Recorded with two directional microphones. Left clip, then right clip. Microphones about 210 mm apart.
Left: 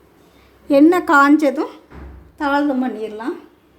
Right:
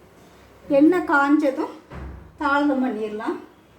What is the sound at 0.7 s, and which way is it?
Speech, 45° left (ahead or behind).